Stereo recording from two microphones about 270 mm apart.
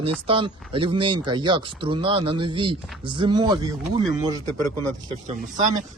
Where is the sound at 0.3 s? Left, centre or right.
Centre.